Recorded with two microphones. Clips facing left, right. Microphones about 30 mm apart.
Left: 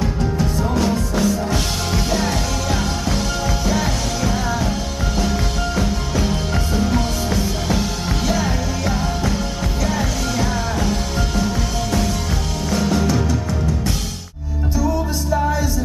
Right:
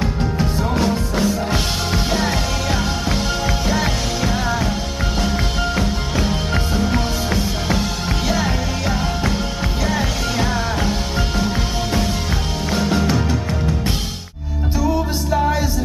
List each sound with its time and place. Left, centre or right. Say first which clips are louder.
0.0 s music: even; right